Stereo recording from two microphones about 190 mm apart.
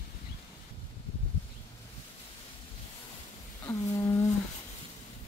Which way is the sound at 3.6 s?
15° left (ahead or behind).